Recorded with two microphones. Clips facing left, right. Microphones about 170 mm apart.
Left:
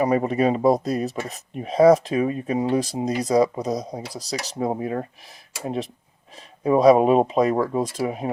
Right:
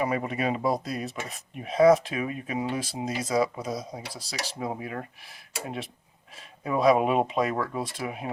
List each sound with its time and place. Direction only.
0.0 s speech: 35° left (ahead or behind)